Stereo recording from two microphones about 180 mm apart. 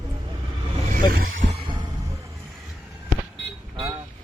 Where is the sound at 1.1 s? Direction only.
50° right (ahead or behind).